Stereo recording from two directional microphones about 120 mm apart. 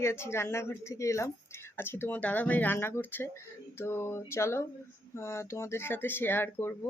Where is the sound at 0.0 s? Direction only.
20° left (ahead or behind).